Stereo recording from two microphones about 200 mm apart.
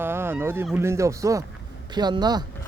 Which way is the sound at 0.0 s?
10° right (ahead or behind).